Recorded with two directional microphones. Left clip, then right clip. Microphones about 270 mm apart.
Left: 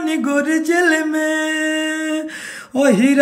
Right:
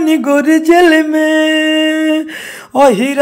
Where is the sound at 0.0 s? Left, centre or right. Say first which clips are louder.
Right 7 dB; centre.